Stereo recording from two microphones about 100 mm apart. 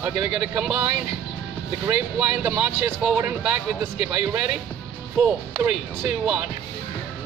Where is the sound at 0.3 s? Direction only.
10° right (ahead or behind).